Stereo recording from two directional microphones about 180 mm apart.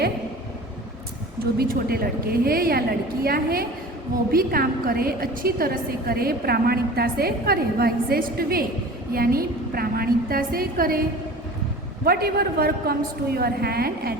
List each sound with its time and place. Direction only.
1.5 s a woman's voice: 55° right (ahead or behind)
12.0 s a woman's voice: 60° right (ahead or behind)